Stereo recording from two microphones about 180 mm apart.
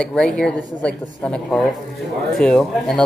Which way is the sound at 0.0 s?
5° left (ahead or behind).